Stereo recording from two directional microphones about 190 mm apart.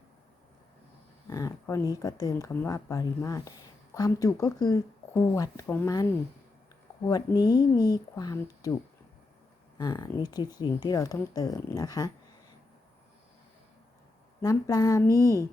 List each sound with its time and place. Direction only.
1.3 s speech: 20° left (ahead or behind)
9.7 s speech: 20° left (ahead or behind)
14.4 s speech: 20° left (ahead or behind)